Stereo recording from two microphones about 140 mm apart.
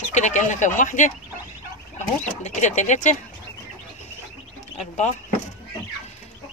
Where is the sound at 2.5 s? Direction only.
55° left (ahead or behind).